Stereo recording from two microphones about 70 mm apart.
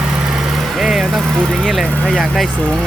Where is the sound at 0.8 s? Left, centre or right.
Centre.